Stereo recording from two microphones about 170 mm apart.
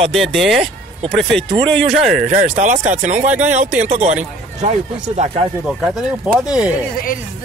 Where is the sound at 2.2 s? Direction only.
45° right (ahead or behind).